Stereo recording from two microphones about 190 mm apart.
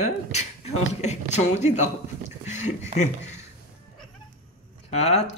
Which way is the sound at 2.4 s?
35° left (ahead or behind).